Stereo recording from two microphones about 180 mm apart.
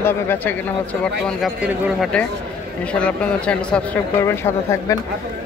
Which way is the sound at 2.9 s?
5° left (ahead or behind).